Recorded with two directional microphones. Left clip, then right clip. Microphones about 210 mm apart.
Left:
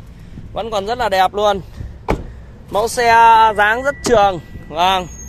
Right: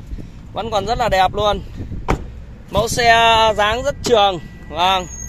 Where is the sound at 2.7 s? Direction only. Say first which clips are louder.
Even; 15° left (ahead or behind).